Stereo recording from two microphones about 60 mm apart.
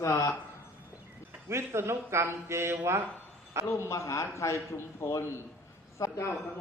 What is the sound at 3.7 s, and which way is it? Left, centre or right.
A man's voice, left.